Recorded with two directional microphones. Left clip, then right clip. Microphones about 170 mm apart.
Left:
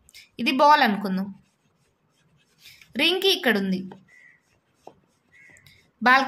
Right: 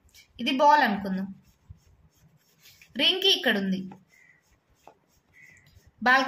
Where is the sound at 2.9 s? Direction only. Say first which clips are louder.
Left 1 dB; 45° left (ahead or behind).